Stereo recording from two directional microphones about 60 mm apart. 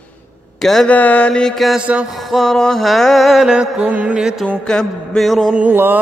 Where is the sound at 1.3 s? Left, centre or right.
Centre.